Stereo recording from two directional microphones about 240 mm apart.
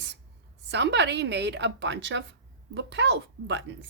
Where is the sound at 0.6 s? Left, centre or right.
Right.